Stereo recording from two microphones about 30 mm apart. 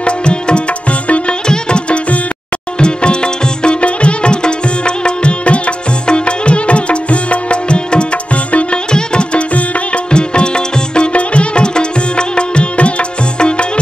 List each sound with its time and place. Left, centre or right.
0.0 s music: left
1.0 s music: left
1.5 s music: left
8.9 s music: left